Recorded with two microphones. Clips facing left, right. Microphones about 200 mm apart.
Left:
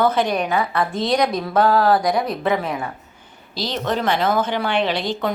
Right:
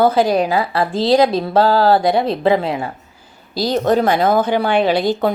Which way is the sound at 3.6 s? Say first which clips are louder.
Right 7 dB; 40° right (ahead or behind).